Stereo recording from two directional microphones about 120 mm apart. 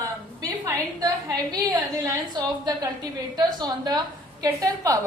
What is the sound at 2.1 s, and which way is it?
A woman's voice, 35° right (ahead or behind).